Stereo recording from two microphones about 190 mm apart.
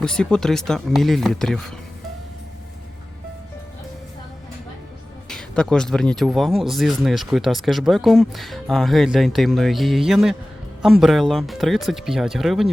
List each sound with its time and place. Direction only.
0.0 s speech: 5° left (ahead or behind)
5.3 s speech: 5° left (ahead or behind)